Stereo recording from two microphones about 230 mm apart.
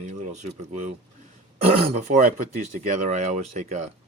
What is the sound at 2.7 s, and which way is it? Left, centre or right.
Speech, right.